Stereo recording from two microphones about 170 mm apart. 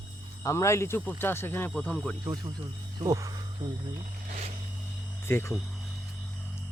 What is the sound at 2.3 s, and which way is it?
Speech, 25° right (ahead or behind).